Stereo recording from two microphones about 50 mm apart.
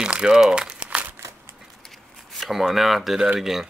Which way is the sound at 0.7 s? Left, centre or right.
Right.